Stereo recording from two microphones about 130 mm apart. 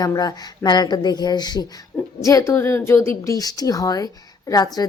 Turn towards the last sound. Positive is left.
turn(degrees=30)  # may be behind; listen again after turning